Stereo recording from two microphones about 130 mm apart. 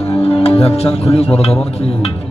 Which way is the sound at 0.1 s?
50° left (ahead or behind).